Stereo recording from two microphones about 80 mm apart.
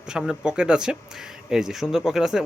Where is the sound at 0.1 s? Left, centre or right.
Centre.